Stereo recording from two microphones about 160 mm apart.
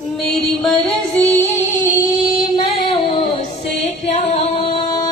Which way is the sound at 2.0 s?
60° left (ahead or behind).